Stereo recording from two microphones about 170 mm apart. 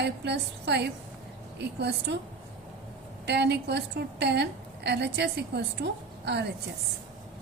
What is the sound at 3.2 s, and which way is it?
A woman's voice, 80° right.